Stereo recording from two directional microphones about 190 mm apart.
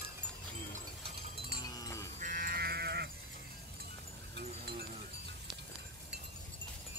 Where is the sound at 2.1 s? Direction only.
45° right (ahead or behind).